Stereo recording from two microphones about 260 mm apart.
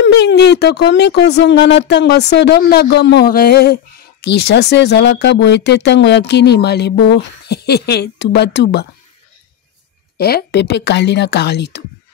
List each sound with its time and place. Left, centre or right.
0.0 s speech: left
10.1 s speech: left